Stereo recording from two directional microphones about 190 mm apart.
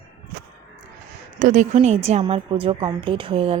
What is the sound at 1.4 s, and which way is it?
A woman's voice, 40° right (ahead or behind).